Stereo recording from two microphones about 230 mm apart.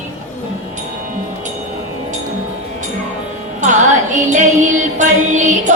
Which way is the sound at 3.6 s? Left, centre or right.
Right.